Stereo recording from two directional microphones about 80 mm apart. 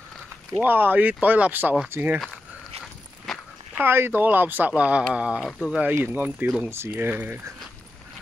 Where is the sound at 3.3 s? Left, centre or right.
Centre.